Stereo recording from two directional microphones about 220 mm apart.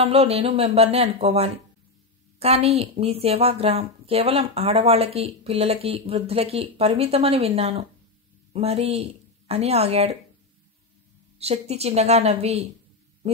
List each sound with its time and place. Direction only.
0.0 s a woman's voice: 25° right (ahead or behind)
11.3 s a woman's voice: 30° right (ahead or behind)